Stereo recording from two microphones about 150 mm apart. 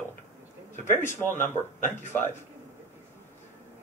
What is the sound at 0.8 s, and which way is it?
Speech, 15° left (ahead or behind).